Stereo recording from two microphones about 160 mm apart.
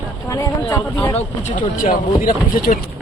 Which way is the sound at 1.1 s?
50° left (ahead or behind).